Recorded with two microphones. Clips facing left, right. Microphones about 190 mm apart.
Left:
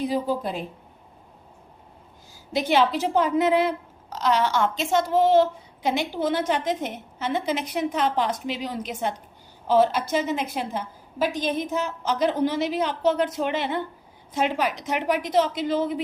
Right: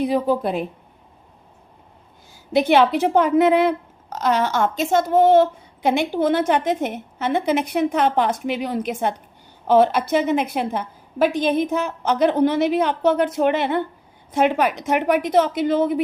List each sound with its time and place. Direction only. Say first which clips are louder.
0.0 s speech: right 5 dB; 65° right (ahead or behind)
2.3 s speech: right 6 dB; 60° right (ahead or behind)